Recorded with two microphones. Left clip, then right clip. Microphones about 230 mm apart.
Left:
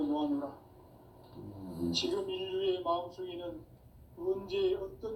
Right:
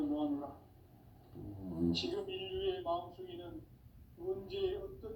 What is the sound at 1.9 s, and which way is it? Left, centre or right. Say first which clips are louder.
A man's voice: left 5 dB; left.